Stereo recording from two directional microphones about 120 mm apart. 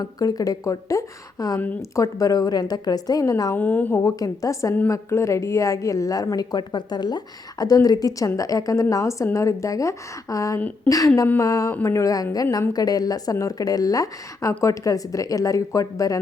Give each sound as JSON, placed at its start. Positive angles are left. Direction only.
{"t": 0.0, "sound": "speech", "side_deg": 30}
{"t": 3.5, "sound": "speech", "side_deg": 15}